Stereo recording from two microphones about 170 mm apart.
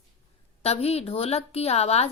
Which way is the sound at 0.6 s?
40° left (ahead or behind).